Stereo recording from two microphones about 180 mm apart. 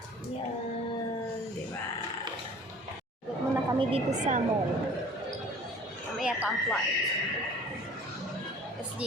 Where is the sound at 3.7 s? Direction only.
35° right (ahead or behind).